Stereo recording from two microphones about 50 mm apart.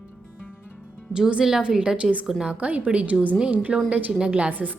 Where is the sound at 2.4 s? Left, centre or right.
Right.